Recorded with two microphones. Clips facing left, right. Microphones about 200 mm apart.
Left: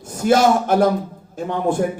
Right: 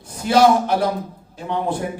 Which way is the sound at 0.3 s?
50° left (ahead or behind).